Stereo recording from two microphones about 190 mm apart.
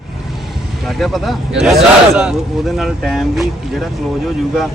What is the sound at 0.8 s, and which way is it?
A man's voice, centre (ahead or behind).